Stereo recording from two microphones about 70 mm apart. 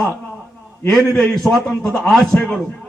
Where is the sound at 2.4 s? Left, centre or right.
Centre.